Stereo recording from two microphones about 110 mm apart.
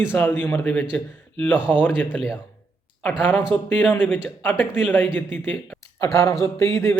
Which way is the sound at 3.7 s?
15° left (ahead or behind).